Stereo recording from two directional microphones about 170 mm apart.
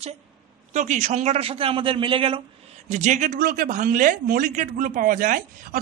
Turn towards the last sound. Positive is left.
turn(degrees=-50)  # may be behind; listen again after turning